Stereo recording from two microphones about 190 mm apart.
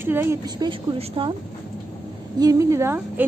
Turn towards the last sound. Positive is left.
turn(degrees=-15)  # may be behind; listen again after turning